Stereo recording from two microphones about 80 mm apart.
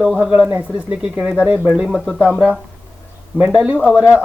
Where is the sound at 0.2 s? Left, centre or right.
Centre.